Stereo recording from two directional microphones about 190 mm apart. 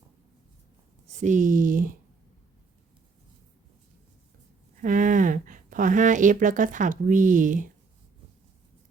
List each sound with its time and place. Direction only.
1.2 s speech: 40° right (ahead or behind)
4.8 s speech: 45° right (ahead or behind)